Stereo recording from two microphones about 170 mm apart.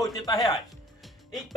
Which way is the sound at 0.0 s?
20° left (ahead or behind).